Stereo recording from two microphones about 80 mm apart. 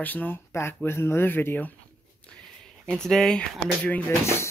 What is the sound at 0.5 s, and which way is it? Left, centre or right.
Speech, left.